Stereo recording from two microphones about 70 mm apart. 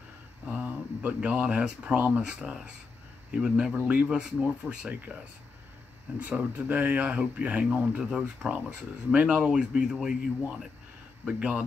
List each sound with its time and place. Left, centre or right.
0.5 s a sound: centre
1.6 s speech: centre
6.1 s speech: right